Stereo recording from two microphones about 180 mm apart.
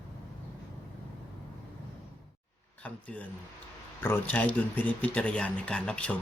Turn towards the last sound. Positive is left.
turn(degrees=5)  # may be behind; listen again after turning